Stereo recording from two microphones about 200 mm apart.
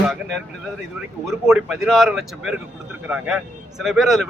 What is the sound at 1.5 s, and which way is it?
Speech, 5° right (ahead or behind).